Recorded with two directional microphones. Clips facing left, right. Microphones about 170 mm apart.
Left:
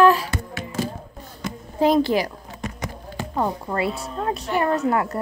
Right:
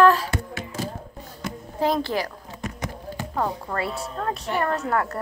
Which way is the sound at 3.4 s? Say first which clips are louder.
Left 3 dB; 15° left (ahead or behind).